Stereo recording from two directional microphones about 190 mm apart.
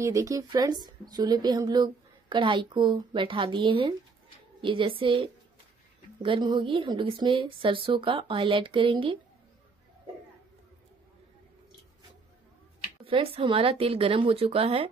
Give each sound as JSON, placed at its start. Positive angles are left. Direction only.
{"t": 0.0, "sound": "a woman's voice", "side_deg": -15}
{"t": 13.0, "sound": "a woman's voice", "side_deg": -30}